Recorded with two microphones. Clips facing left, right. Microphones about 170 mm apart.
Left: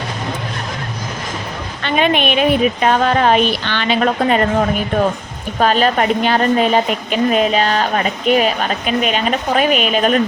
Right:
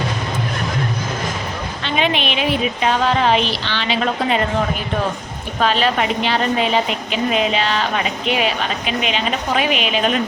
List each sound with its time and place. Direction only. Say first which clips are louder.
1.8 s speech: left 5 dB; 50° left (ahead or behind)
5.5 s speech: left 3 dB; 45° left (ahead or behind)